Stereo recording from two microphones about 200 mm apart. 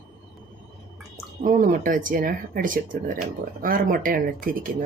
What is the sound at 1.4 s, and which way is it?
A woman's voice, 40° right (ahead or behind).